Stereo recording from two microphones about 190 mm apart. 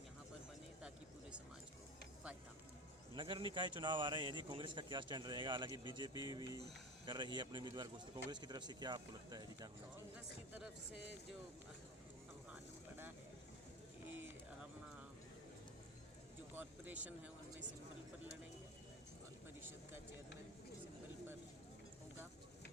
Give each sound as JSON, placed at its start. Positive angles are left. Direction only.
{"t": 0.8, "sound": "a sound", "side_deg": -5}
{"t": 3.2, "sound": "speech", "side_deg": -25}
{"t": 14.1, "sound": "bird", "side_deg": -10}
{"t": 16.6, "sound": "speech", "side_deg": -10}